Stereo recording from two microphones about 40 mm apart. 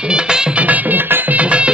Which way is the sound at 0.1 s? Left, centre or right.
Centre.